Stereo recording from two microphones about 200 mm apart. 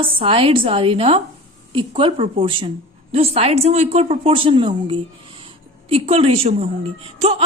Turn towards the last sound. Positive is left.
turn(degrees=-30)  # may be behind; listen again after turning